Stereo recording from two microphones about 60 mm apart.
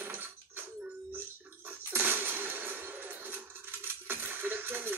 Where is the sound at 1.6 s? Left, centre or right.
Right.